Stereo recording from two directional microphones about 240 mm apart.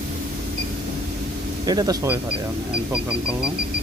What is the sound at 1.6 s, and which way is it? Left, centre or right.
Speech, centre.